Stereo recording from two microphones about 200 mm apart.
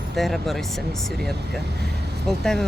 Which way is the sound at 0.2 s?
Centre (ahead or behind).